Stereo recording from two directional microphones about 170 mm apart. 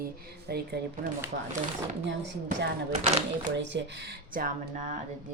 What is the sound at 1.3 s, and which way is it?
Speech, 60° right (ahead or behind).